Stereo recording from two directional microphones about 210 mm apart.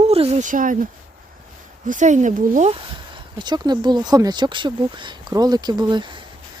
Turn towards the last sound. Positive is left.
turn(degrees=-20)  # may be behind; listen again after turning